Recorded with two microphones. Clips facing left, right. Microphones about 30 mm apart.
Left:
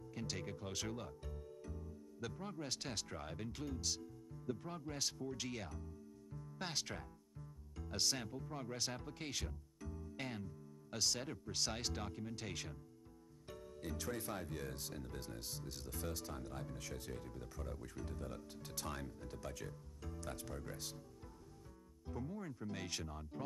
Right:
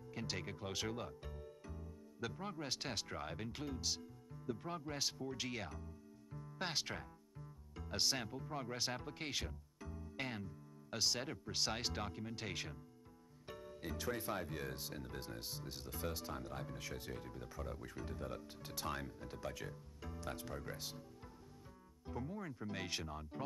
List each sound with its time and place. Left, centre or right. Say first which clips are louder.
0.1 s speech: right 1 dB; centre
22.0 s speech: right 1 dB; centre